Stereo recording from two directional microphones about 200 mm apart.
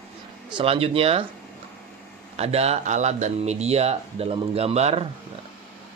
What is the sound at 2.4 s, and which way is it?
Speech, 30° right (ahead or behind).